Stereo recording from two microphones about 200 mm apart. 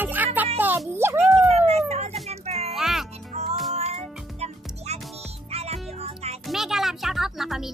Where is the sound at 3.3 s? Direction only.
30° right (ahead or behind).